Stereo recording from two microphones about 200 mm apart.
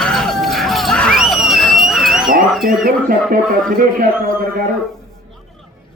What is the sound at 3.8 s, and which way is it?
Speech, 45° right (ahead or behind).